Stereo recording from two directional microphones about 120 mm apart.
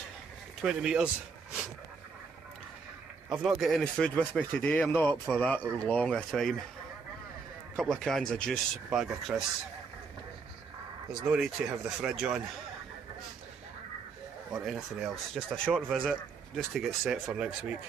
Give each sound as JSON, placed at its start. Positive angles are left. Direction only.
{"t": 0.6, "sound": "speech", "side_deg": -5}
{"t": 3.3, "sound": "speech", "side_deg": -5}
{"t": 5.2, "sound": "speech", "side_deg": 10}
{"t": 7.8, "sound": "speech", "side_deg": 5}
{"t": 11.1, "sound": "speech", "side_deg": -5}
{"t": 14.5, "sound": "speech", "side_deg": 0}